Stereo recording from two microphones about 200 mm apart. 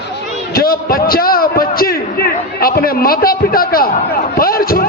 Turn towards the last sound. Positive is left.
turn(degrees=45)  # may be behind; listen again after turning